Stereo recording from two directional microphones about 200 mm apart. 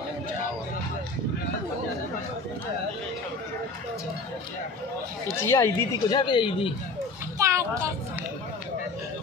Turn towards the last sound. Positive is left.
turn(degrees=-15)  # may be behind; listen again after turning